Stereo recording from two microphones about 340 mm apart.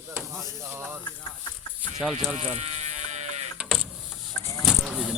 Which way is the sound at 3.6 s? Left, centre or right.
Centre.